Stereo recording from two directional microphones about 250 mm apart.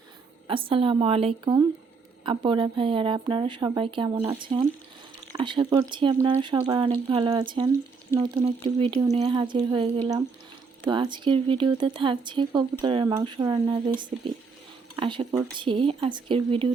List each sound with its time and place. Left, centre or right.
0.4 s speech: right
14.9 s speech: centre